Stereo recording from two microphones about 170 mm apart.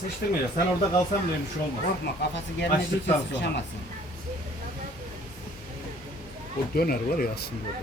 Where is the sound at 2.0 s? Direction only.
85° left.